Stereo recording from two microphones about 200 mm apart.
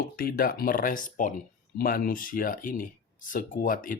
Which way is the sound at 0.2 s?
50° left (ahead or behind).